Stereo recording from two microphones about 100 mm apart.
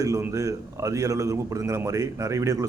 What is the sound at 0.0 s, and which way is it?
A man's voice, 30° right (ahead or behind).